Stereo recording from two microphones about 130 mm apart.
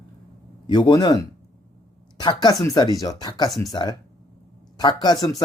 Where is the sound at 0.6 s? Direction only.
35° left (ahead or behind).